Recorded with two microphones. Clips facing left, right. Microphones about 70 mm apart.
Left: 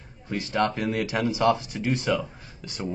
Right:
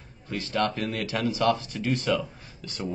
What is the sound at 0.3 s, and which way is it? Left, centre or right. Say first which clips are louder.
Speech: left 2 dB; centre.